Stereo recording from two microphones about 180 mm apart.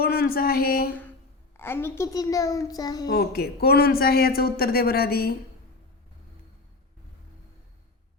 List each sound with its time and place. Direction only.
0.0 s speech: 55° left (ahead or behind)
1.5 s a child's voice: 15° left (ahead or behind)
3.1 s speech: 60° left (ahead or behind)